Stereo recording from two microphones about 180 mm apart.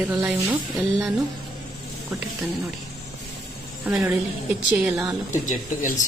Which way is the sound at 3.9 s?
5° right (ahead or behind).